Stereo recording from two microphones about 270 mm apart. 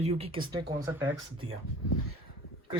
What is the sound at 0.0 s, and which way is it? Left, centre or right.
Speech, right.